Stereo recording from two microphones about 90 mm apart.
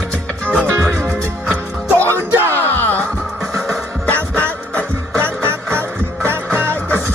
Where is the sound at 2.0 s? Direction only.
30° right (ahead or behind).